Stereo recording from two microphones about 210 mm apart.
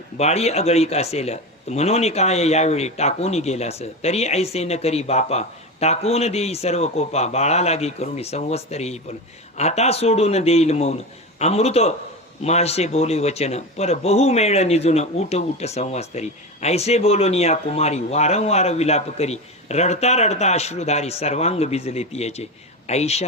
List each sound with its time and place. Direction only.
0.2 s speech: 30° left (ahead or behind)